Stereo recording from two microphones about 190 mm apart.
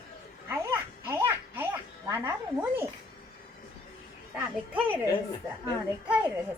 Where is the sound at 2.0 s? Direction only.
15° right (ahead or behind).